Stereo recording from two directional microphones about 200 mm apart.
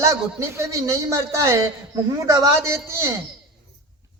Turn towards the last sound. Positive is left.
turn(degrees=-15)  # may be behind; listen again after turning